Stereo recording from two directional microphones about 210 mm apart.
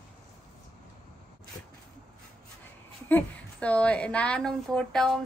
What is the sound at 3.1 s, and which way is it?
A woman's voice, 5° left (ahead or behind).